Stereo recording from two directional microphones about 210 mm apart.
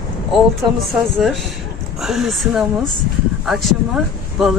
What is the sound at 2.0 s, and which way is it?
Speech, centre (ahead or behind).